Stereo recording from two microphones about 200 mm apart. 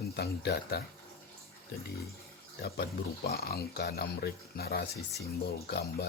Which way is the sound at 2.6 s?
50° left (ahead or behind).